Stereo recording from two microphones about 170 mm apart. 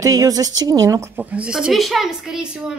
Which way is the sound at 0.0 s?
20° right (ahead or behind).